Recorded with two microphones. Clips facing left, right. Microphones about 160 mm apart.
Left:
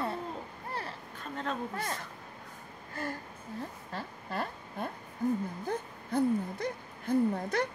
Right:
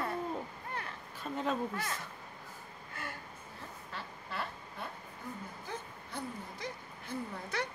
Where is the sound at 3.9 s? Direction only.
45° left (ahead or behind).